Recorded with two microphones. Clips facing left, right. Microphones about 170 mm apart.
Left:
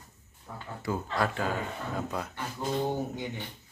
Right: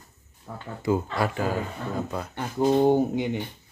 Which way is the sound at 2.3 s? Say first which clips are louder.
Right 14 dB; 65° right (ahead or behind).